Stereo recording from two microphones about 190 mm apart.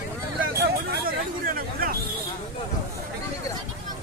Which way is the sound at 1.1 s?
50° right (ahead or behind).